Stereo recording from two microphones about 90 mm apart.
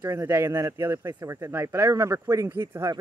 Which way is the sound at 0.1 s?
30° right (ahead or behind).